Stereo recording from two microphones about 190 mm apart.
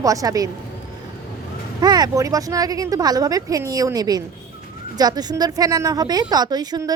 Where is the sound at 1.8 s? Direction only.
20° right (ahead or behind).